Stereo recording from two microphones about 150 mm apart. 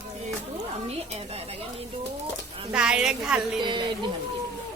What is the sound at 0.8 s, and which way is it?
Speech, 45° right (ahead or behind).